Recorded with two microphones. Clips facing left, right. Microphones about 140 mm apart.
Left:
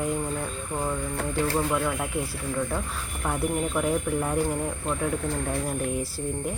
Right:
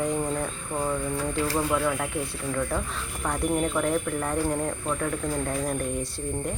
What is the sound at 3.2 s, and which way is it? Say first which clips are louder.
Speech: right 1 dB; 5° left (ahead or behind).